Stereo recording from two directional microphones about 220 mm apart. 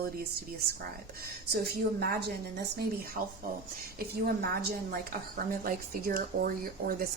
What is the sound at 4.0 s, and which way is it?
A woman's voice, 45° right (ahead or behind).